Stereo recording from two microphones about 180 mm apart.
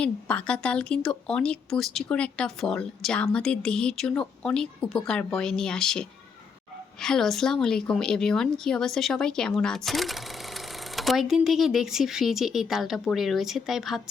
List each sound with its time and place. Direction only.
0.0 s a woman's voice: 5° left (ahead or behind)